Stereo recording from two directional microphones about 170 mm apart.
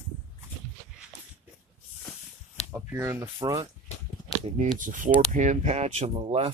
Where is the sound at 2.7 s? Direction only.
15° right (ahead or behind).